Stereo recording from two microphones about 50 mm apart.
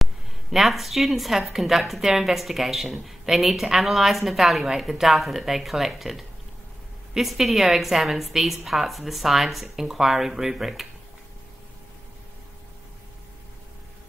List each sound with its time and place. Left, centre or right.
0.0 s a woman's voice: centre